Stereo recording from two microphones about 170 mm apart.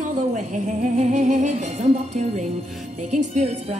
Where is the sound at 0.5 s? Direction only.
45° right (ahead or behind).